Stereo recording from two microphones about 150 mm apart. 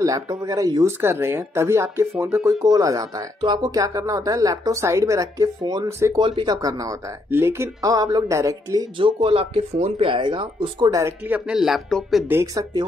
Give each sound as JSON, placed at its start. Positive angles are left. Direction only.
{"t": 0.0, "sound": "speech", "side_deg": -20}
{"t": 6.2, "sound": "speech", "side_deg": -30}
{"t": 8.9, "sound": "speech", "side_deg": -35}
{"t": 10.9, "sound": "speech", "side_deg": -20}
{"t": 11.2, "sound": "speech", "side_deg": -10}
{"t": 12.3, "sound": "speech", "side_deg": -15}